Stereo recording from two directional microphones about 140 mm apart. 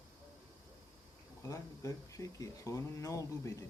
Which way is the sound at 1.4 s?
25° left (ahead or behind).